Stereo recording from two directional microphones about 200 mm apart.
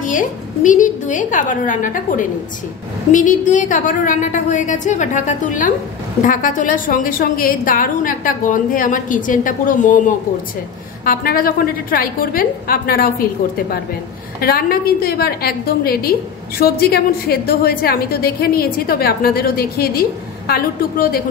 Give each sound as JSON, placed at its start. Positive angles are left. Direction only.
{"t": 0.0, "sound": "a woman's voice", "side_deg": 40}